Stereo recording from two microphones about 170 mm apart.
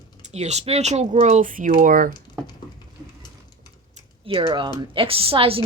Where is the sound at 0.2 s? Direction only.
40° right (ahead or behind).